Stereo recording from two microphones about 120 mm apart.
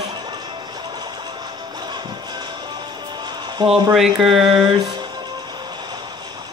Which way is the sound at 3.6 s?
35° right (ahead or behind).